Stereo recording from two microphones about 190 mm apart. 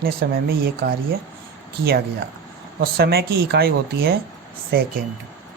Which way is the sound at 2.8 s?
55° right (ahead or behind).